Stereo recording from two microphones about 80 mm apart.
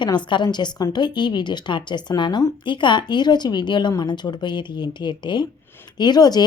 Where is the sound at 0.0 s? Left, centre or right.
Left.